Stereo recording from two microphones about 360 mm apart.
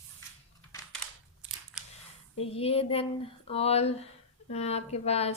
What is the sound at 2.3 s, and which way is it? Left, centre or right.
Speech, centre.